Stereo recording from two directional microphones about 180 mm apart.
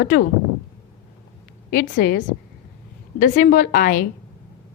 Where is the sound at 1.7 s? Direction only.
55° left (ahead or behind).